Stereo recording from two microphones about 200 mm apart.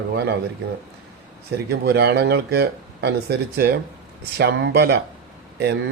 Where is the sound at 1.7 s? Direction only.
55° right (ahead or behind).